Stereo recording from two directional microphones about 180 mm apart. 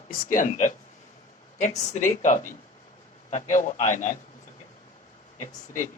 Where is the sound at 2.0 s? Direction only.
45° left (ahead or behind).